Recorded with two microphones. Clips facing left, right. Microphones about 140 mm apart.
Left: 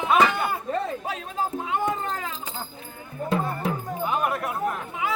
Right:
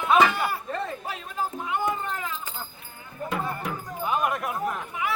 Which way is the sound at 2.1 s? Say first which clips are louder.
Left 1 dB; 35° left (ahead or behind).